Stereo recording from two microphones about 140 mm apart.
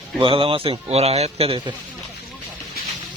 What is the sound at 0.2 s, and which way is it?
A man's voice, 40° right (ahead or behind).